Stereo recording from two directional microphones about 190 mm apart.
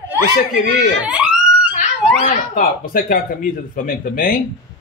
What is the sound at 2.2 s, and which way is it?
Speech, 45° left (ahead or behind).